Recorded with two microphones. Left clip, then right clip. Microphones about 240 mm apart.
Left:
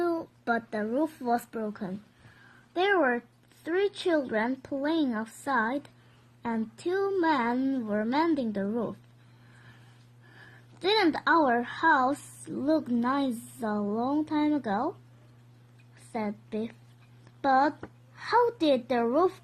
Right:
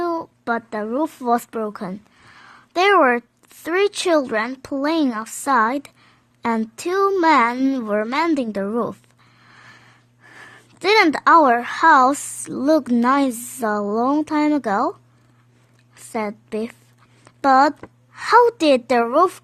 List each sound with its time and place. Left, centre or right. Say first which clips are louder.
0.0 s speech: right 6 dB; right
10.3 s speech: right 10 dB; right
16.1 s a woman's voice: right 9 dB; right